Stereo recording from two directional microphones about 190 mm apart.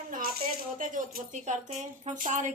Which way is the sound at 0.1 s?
50° right (ahead or behind).